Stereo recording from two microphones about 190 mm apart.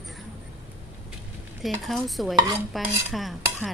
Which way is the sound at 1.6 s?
Centre (ahead or behind).